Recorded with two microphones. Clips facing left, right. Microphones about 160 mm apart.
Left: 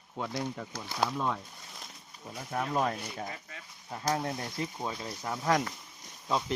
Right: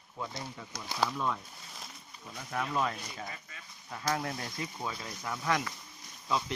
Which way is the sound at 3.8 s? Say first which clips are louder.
Left 2 dB; 30° left (ahead or behind).